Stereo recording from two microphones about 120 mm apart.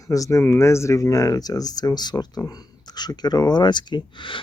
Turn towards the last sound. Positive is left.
turn(degrees=45)  # may be behind; listen again after turning